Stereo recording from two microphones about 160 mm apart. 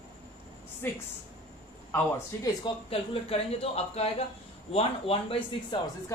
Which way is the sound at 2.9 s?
35° left (ahead or behind).